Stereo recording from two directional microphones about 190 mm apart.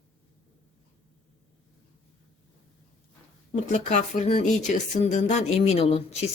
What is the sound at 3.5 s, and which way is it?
Speech, 40° left (ahead or behind).